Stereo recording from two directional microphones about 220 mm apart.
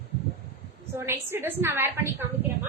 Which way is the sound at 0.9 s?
10° right (ahead or behind).